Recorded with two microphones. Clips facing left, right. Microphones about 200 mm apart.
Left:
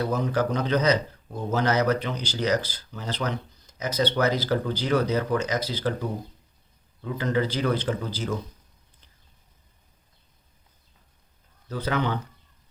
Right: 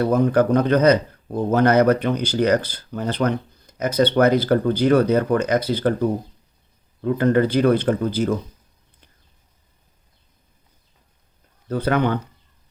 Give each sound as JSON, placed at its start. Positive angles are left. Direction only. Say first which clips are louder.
{"t": 0.0, "sound": "speech", "louder": "right 8 dB", "side_deg": -55}
{"t": 11.7, "sound": "speech", "louder": "right 7 dB", "side_deg": -55}